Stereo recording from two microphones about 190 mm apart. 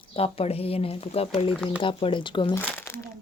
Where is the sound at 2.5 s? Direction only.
10° left (ahead or behind).